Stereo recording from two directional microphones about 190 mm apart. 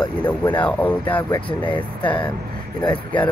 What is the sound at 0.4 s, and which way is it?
Speech, 10° left (ahead or behind).